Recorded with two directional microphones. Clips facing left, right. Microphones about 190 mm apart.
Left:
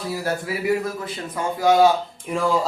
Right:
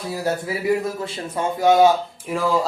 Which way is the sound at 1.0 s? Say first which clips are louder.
Right 2 dB; 25° right (ahead or behind).